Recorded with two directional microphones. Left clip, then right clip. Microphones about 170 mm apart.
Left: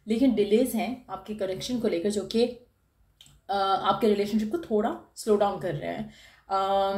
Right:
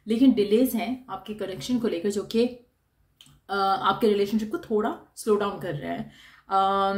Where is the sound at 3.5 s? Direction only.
35° right (ahead or behind).